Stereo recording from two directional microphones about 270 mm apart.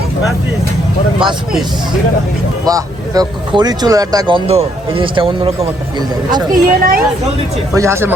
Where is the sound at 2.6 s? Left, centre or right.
Centre.